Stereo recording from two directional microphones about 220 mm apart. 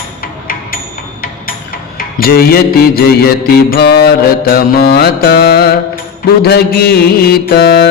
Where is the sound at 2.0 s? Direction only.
40° left (ahead or behind).